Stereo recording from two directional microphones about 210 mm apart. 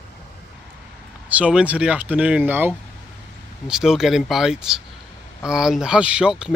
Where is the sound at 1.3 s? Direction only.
5° right (ahead or behind).